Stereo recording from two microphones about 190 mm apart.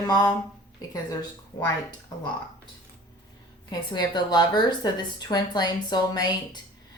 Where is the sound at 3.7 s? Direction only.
20° left (ahead or behind).